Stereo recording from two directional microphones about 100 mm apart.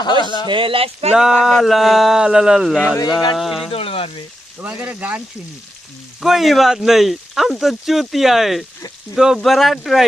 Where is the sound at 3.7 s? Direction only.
70° left (ahead or behind).